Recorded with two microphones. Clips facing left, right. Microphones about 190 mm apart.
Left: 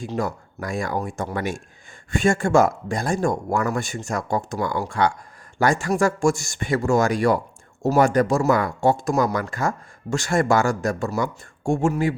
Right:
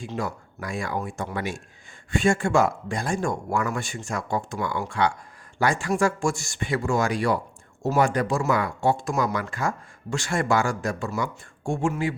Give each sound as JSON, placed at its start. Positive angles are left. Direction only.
{"t": 0.0, "sound": "speech", "side_deg": 40}